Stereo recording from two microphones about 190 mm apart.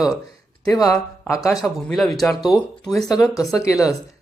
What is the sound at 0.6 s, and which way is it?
Speech, 20° left (ahead or behind).